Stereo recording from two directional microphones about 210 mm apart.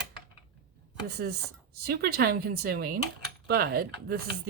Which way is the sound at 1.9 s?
45° right (ahead or behind).